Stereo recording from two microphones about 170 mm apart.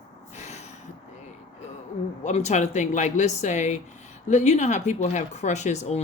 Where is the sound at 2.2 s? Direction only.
40° left (ahead or behind).